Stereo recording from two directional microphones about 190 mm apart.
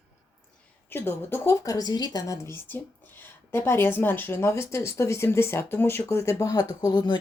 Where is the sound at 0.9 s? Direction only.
10° left (ahead or behind).